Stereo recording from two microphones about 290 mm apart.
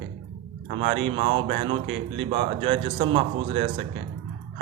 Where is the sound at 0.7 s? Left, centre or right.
Centre.